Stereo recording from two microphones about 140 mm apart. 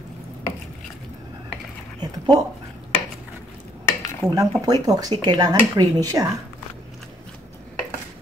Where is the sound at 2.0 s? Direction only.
30° right (ahead or behind).